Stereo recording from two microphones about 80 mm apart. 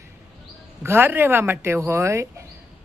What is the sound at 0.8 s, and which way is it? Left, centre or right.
Speech, right.